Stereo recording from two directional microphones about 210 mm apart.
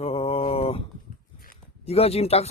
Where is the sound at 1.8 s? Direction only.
30° left (ahead or behind).